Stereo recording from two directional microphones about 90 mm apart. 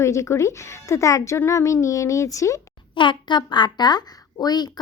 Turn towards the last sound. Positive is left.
turn(degrees=50)  # may be behind; listen again after turning